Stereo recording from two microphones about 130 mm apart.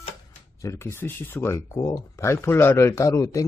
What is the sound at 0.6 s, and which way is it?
Speech, 25° left (ahead or behind).